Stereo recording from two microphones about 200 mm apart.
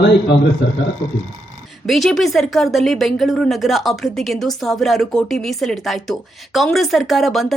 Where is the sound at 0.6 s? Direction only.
60° left (ahead or behind).